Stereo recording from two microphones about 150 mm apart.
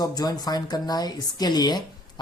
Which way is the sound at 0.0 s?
25° left (ahead or behind).